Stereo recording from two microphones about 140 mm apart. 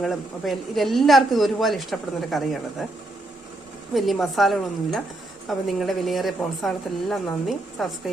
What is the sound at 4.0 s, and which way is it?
A man's voice, centre (ahead or behind).